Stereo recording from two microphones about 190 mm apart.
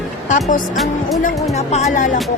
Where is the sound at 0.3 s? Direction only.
40° left (ahead or behind).